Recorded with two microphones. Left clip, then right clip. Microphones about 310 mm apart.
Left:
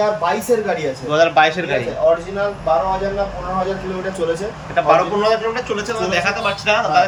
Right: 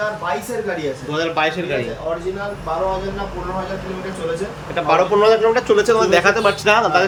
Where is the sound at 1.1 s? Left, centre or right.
Centre.